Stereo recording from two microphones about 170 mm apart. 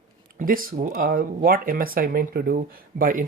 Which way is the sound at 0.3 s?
55° right (ahead or behind).